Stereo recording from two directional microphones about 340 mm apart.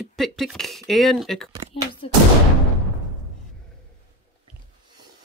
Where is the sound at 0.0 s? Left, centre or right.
Centre.